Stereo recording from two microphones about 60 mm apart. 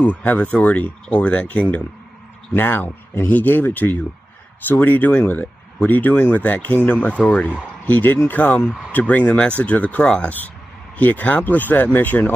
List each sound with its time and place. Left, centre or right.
0.0 s speech: left
7.2 s speech: centre
7.8 s speech: left
10.0 s speech: centre
11.0 s speech: left